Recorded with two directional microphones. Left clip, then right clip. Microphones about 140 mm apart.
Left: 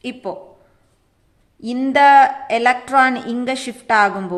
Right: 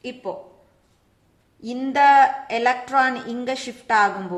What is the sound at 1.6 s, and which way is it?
A woman's voice, 30° left (ahead or behind).